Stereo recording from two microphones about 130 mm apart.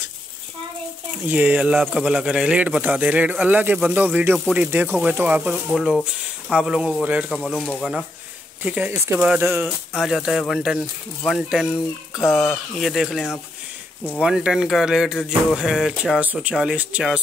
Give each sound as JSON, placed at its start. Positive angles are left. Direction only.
{"t": 1.3, "sound": "speech", "side_deg": -10}
{"t": 5.7, "sound": "speech", "side_deg": 0}
{"t": 7.2, "sound": "speech", "side_deg": 5}
{"t": 8.6, "sound": "speech", "side_deg": -10}
{"t": 9.7, "sound": "speech", "side_deg": 0}
{"t": 12.2, "sound": "speech", "side_deg": 20}
{"t": 12.7, "sound": "speech", "side_deg": 0}